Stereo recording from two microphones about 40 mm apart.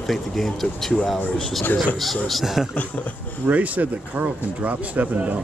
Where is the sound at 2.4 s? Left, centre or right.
Centre.